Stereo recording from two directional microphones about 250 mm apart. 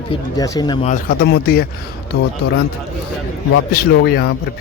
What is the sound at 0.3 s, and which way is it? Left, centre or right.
Speech, centre.